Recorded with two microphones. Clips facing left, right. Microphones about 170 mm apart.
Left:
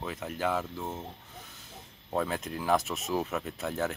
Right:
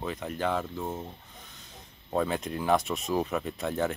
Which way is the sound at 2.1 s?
Centre (ahead or behind).